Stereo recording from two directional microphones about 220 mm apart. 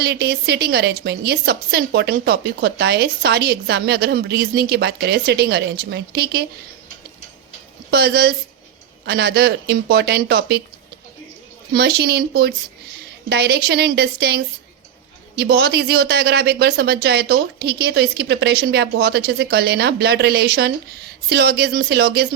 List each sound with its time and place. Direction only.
0.0 s a woman's voice: 45° right (ahead or behind)
7.9 s a woman's voice: 45° right (ahead or behind)
11.7 s a woman's voice: 45° right (ahead or behind)